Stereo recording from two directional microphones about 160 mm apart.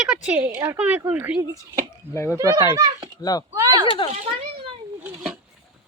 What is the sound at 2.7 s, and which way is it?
Speech, 25° right (ahead or behind).